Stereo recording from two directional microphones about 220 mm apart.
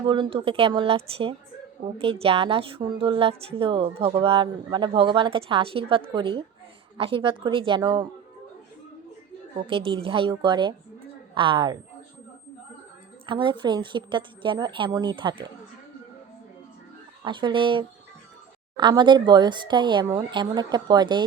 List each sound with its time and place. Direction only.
0.0 s a woman's voice: 20° right (ahead or behind)
9.6 s a woman's voice: 25° right (ahead or behind)
13.2 s a woman's voice: 20° right (ahead or behind)
17.2 s a woman's voice: 20° right (ahead or behind)